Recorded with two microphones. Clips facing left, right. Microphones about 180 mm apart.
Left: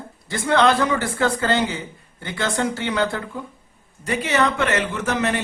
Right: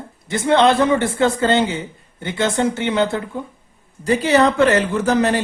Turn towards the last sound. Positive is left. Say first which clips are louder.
# right 6 dB
turn(degrees=-35)  # may be behind; listen again after turning